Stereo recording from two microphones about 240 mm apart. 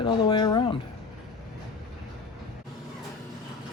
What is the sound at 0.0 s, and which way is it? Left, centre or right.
Speech, centre.